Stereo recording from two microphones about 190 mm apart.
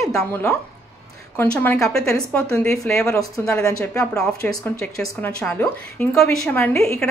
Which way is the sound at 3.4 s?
15° left (ahead or behind).